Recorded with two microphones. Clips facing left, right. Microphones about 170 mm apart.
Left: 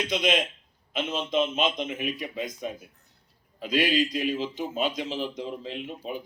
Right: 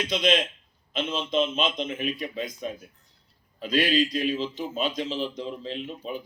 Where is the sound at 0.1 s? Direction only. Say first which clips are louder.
Right 3 dB; 50° left (ahead or behind).